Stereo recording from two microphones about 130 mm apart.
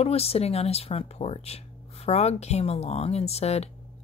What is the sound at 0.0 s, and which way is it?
Speech, 50° left (ahead or behind).